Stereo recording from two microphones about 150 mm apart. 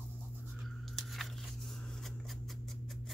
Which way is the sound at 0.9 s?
Centre (ahead or behind).